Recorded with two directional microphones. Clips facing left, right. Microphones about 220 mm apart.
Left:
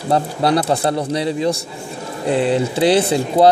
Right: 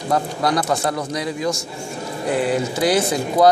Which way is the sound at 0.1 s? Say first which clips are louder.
Left 4 dB; 30° left (ahead or behind).